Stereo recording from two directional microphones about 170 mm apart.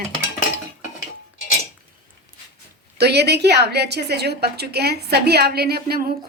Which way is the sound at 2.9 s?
75° right (ahead or behind).